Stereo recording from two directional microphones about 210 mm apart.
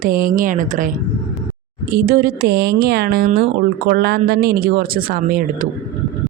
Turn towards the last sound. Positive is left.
turn(degrees=-40)  # may be behind; listen again after turning